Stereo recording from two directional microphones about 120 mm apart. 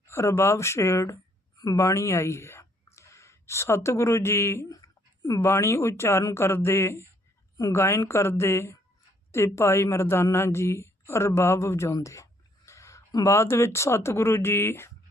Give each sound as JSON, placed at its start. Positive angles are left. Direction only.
{"t": 0.1, "sound": "speech", "side_deg": 25}